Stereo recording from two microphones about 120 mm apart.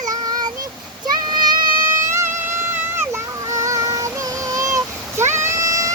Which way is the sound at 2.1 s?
20° right (ahead or behind).